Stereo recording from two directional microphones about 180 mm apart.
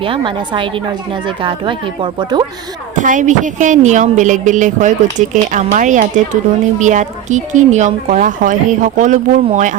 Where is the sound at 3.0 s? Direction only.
45° right (ahead or behind).